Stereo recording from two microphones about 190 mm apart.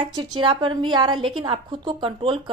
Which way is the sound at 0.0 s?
25° right (ahead or behind).